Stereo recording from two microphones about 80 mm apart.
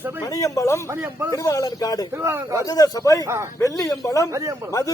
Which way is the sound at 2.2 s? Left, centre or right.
Right.